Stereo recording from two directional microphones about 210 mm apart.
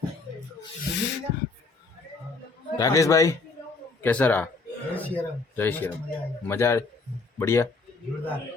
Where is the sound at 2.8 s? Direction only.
15° left (ahead or behind).